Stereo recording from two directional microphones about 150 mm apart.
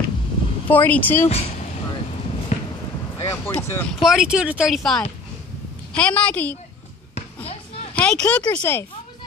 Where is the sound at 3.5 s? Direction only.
15° left (ahead or behind).